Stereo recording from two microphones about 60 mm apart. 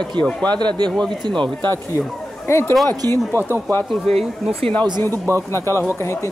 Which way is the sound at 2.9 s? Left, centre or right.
Right.